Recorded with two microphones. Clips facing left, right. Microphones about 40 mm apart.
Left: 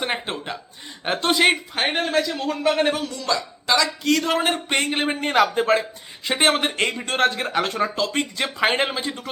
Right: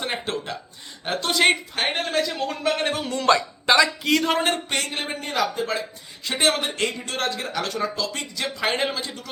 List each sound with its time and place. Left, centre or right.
0.0 s a sound: centre
1.0 s speech: left
1.4 s speech: centre
3.1 s speech: right
4.0 s speech: centre
4.5 s speech: left
6.2 s speech: left